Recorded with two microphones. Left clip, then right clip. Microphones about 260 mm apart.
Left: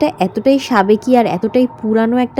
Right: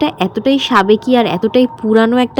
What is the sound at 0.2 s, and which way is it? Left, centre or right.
A woman's voice, centre.